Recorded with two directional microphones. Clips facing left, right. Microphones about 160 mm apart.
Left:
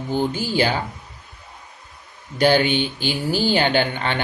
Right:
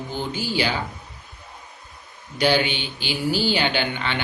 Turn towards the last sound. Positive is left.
turn(degrees=45)  # may be behind; listen again after turning